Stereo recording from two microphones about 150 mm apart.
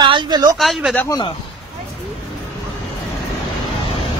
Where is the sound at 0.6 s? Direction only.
Centre (ahead or behind).